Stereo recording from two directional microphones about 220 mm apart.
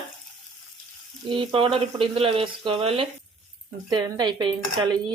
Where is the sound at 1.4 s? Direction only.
25° right (ahead or behind).